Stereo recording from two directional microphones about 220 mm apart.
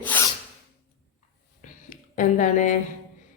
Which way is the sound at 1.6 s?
35° left (ahead or behind).